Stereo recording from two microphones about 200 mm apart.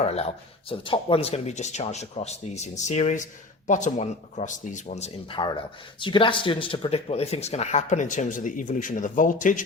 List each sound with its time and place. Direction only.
0.0 s speech: 30° left (ahead or behind)